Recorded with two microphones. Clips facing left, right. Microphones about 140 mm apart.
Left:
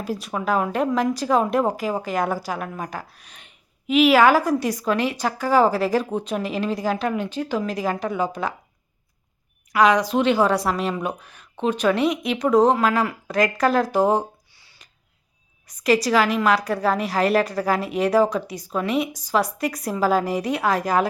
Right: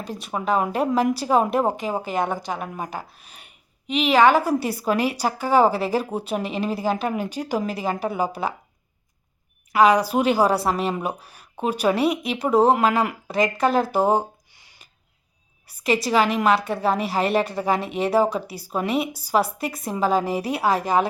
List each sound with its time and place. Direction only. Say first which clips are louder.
0.0 s speech: left 2 dB; centre (ahead or behind)
3.8 s a woman's voice: left 2 dB; 5° left (ahead or behind)
9.8 s a woman's voice: even; 5° right (ahead or behind)
10.5 s speech: even; 30° right (ahead or behind)
11.5 s a woman's voice: left 1 dB; 10° right (ahead or behind)
12.8 s speech: even; 25° right (ahead or behind)
13.2 s speech: left 2 dB; centre (ahead or behind)
14.5 s a sound: right 1 dB; 15° right (ahead or behind)
15.6 s a woman's voice: left 3 dB; centre (ahead or behind)
17.4 s speech: left 2 dB; 25° right (ahead or behind)
17.7 s speech: left 1 dB; centre (ahead or behind)